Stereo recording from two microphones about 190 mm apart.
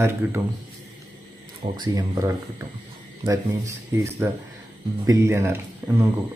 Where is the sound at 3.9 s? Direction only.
15° right (ahead or behind).